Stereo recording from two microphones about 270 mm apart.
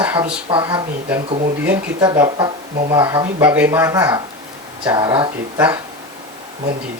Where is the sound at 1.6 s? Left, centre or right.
Centre.